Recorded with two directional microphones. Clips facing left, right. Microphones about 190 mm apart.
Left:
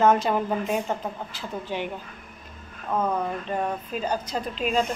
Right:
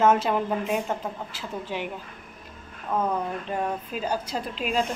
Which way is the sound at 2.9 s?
10° right (ahead or behind).